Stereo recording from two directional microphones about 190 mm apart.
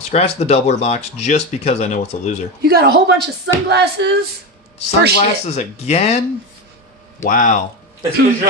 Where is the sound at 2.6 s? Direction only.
55° right (ahead or behind).